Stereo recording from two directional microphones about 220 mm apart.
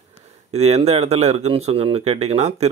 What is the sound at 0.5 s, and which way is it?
Speech, 30° right (ahead or behind).